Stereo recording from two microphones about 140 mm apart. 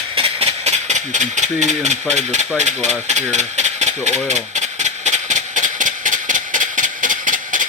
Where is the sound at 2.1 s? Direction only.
55° right (ahead or behind).